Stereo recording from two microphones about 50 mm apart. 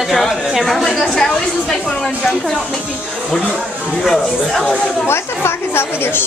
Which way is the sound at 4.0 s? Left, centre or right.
Centre.